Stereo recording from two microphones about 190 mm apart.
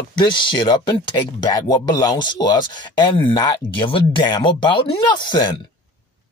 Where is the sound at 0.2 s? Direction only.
25° left (ahead or behind).